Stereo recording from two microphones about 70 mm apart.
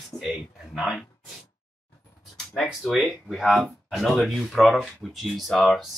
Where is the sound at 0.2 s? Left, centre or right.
Centre.